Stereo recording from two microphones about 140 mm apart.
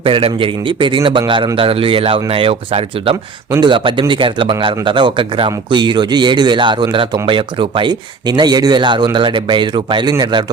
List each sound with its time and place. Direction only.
0.0 s speech: 40° right (ahead or behind)